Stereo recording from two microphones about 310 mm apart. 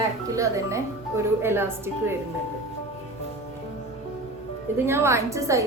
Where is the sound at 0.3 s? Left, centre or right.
Centre.